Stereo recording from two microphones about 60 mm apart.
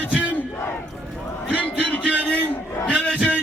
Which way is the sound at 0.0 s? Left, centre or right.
Right.